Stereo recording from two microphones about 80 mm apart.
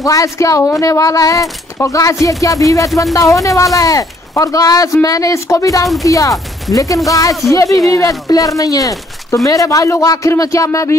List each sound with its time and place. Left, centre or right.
0.0 s speech: left